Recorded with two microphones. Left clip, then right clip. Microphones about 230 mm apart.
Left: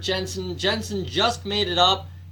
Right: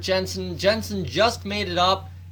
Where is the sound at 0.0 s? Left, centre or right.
Right.